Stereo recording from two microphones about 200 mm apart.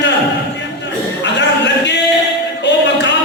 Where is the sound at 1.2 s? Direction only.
60° left (ahead or behind).